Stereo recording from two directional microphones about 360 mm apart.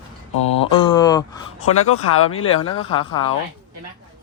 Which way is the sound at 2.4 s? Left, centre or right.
Centre.